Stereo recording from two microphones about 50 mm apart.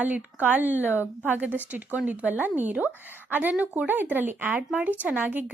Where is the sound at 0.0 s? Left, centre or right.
Right.